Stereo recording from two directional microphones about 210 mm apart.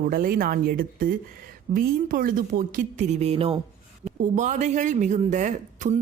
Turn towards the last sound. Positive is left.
turn(degrees=-35)  # may be behind; listen again after turning